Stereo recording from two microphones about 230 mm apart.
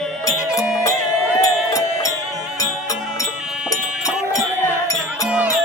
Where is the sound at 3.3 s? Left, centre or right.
Centre.